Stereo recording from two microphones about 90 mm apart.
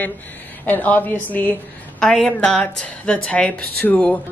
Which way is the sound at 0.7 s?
20° left (ahead or behind).